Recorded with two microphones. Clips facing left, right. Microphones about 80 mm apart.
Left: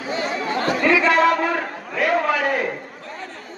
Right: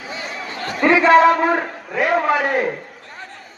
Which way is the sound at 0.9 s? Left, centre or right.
Right.